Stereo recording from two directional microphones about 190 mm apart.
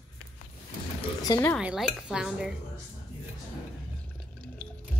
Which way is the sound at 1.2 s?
20° left (ahead or behind).